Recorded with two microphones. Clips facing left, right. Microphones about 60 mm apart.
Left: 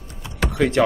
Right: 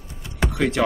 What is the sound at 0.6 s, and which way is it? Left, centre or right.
Speech, centre.